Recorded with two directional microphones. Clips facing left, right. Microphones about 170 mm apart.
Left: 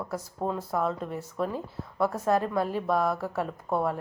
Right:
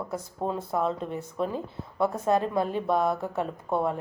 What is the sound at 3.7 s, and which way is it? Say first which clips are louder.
Speech: right 1 dB; centre (ahead or behind).